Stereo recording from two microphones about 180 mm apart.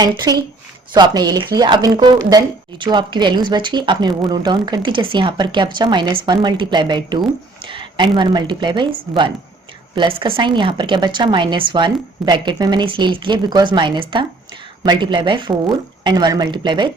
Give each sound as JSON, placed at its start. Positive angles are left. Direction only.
{"t": 0.0, "sound": "a woman's voice", "side_deg": -20}